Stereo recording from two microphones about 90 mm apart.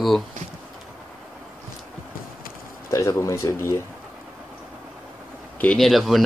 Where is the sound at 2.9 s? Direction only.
35° left (ahead or behind).